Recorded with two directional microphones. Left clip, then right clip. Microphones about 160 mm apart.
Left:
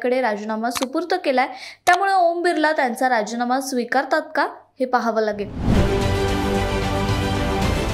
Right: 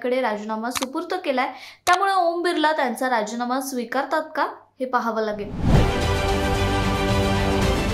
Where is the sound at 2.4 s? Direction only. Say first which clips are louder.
Left 2 dB; 20° left (ahead or behind).